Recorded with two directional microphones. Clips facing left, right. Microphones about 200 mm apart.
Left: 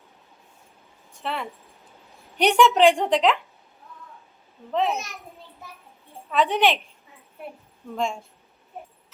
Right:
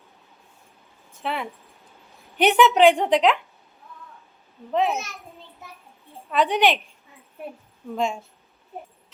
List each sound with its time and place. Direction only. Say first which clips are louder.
1.1 s a woman's voice: right 2 dB; 5° right (ahead or behind)
4.7 s a woman's voice: right 1 dB; 5° right (ahead or behind)
6.3 s a woman's voice: right 1 dB; centre (ahead or behind)
7.9 s a woman's voice: right 2 dB; 5° right (ahead or behind)